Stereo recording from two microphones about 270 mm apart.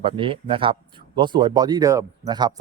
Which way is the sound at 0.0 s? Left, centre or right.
Centre.